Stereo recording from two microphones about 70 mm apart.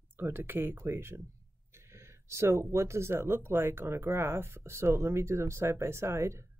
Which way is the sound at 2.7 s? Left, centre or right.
Right.